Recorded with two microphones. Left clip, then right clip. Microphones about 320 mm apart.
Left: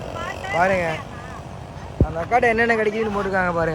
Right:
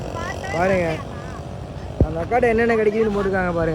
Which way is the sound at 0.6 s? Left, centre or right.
Centre.